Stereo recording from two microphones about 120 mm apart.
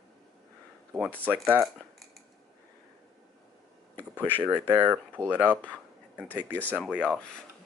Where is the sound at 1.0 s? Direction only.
10° left (ahead or behind).